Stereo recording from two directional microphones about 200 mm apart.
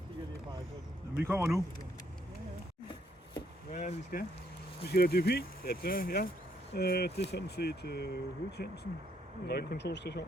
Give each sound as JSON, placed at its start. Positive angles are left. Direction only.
{"t": 1.2, "sound": "speech", "side_deg": -10}
{"t": 3.7, "sound": "speech", "side_deg": 35}
{"t": 4.8, "sound": "speech", "side_deg": 55}